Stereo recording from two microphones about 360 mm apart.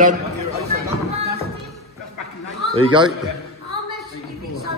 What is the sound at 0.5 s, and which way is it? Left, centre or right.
Music, centre.